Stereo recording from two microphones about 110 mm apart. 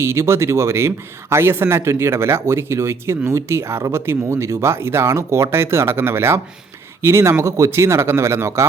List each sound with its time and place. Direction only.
0.0 s a man's voice: 25° right (ahead or behind)